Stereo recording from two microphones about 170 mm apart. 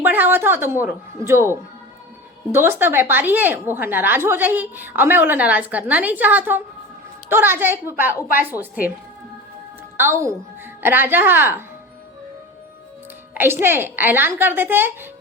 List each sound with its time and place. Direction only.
0.0 s a woman's voice: 10° right (ahead or behind)
10.0 s a woman's voice: 15° right (ahead or behind)
13.3 s a woman's voice: 10° right (ahead or behind)